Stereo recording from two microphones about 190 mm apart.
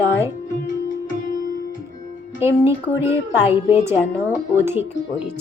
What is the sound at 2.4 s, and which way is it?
A woman's voice, 15° right (ahead or behind).